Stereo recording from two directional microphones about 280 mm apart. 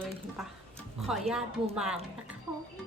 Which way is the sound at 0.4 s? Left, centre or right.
Centre.